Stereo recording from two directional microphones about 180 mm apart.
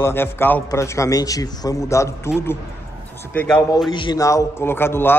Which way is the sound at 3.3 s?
10° left (ahead or behind).